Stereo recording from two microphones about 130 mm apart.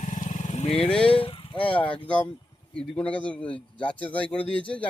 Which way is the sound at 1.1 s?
45° left (ahead or behind).